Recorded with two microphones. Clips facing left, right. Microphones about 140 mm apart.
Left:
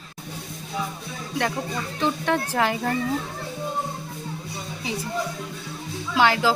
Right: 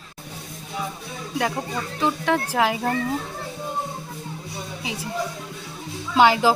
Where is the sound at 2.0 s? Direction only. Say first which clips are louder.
Right 1 dB; 5° right (ahead or behind).